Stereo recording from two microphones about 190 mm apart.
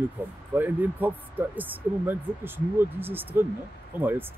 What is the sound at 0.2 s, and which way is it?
Speech, 10° right (ahead or behind).